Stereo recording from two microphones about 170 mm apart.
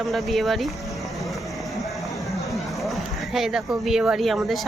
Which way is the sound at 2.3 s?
Centre (ahead or behind).